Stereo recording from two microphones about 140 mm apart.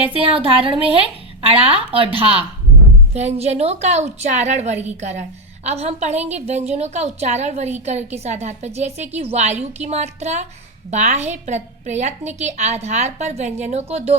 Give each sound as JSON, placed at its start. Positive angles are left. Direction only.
{"t": 0.0, "sound": "a woman's voice", "side_deg": -40}